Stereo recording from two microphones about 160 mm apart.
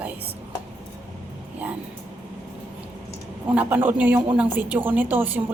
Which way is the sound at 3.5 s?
10° right (ahead or behind).